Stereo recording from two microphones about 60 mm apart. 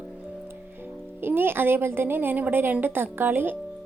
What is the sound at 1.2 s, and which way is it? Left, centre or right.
A woman's voice, right.